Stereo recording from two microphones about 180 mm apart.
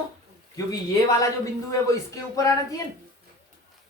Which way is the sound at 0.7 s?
20° left (ahead or behind).